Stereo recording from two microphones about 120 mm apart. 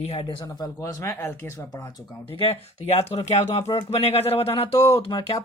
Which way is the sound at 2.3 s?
55° left (ahead or behind).